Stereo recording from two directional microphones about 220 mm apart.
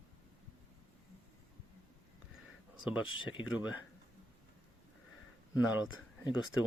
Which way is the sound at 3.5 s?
5° right (ahead or behind).